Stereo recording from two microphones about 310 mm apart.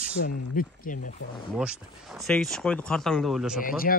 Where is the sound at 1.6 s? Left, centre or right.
Centre.